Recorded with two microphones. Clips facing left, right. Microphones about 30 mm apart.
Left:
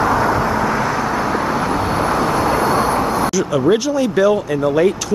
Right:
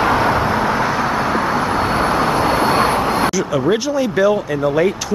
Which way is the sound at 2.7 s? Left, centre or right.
Right.